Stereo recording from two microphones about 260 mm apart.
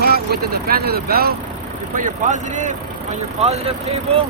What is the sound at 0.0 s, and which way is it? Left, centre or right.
Speech, right.